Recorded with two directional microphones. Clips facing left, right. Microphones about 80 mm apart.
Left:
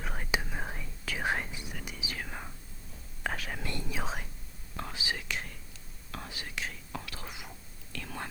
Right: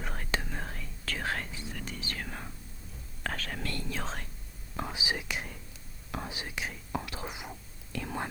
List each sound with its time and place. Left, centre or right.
0.0 s whispering: centre
4.8 s whispering: centre